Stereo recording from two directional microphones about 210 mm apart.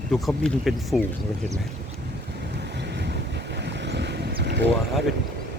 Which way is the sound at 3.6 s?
55° right (ahead or behind).